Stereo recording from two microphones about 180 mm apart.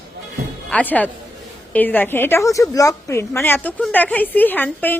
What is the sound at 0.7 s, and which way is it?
A woman's voice, 10° left (ahead or behind).